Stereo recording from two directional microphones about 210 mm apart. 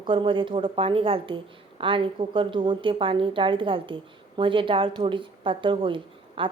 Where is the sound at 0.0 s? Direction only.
25° right (ahead or behind).